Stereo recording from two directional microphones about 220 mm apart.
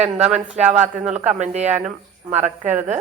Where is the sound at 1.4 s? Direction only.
30° right (ahead or behind).